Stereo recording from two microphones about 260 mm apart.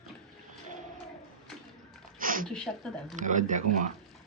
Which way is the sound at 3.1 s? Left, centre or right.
Right.